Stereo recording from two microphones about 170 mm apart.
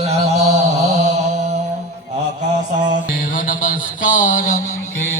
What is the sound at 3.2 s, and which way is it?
Mantra, 55° left (ahead or behind).